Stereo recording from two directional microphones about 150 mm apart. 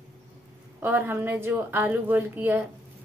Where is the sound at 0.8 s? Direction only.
15° right (ahead or behind).